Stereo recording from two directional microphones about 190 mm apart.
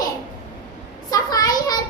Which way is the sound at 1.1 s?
20° left (ahead or behind).